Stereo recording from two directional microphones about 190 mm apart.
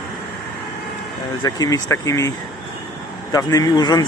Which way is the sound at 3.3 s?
20° left (ahead or behind).